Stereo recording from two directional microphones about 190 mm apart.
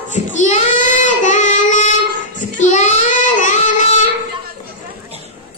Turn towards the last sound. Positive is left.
turn(degrees=40)  # may be behind; listen again after turning